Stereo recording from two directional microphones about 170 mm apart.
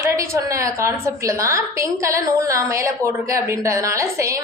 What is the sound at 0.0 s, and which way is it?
A woman's voice, 15° right (ahead or behind).